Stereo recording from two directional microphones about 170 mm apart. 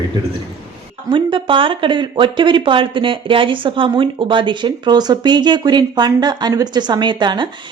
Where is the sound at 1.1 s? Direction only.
30° right (ahead or behind).